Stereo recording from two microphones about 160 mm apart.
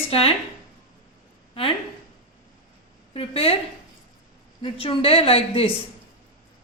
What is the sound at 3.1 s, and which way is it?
Speech, 35° left (ahead or behind).